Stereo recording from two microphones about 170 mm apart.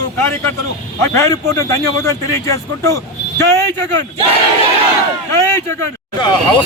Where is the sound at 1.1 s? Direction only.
15° left (ahead or behind).